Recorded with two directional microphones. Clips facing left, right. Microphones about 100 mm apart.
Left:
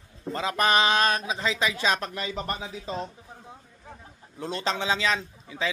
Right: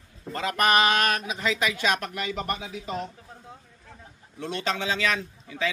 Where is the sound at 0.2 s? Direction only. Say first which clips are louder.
Even; 20° left (ahead or behind).